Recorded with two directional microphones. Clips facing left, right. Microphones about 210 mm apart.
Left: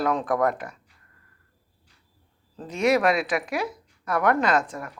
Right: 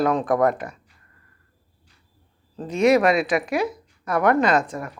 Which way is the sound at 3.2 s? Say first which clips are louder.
Right 5 dB; 20° right (ahead or behind).